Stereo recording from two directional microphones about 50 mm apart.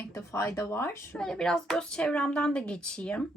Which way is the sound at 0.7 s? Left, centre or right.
Left.